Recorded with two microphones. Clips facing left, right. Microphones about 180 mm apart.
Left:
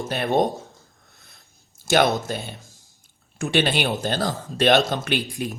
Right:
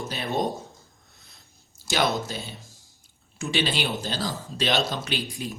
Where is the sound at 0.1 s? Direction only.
55° left (ahead or behind).